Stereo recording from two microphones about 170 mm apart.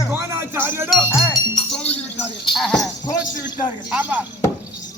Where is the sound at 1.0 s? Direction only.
15° left (ahead or behind).